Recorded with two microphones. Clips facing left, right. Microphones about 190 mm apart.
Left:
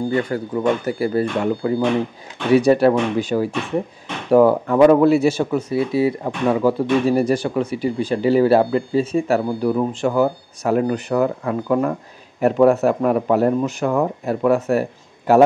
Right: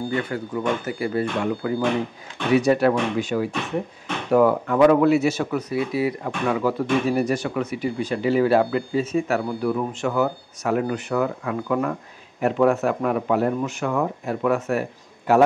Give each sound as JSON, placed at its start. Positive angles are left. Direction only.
{"t": 0.1, "sound": "speech", "side_deg": 35}